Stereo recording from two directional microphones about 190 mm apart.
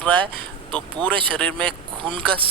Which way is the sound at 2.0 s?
25° right (ahead or behind).